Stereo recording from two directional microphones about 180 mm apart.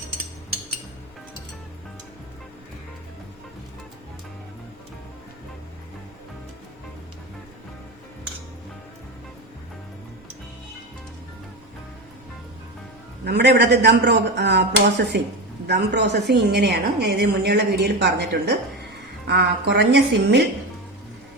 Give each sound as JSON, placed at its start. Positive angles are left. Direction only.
{"t": 13.2, "sound": "a woman's voice", "side_deg": -65}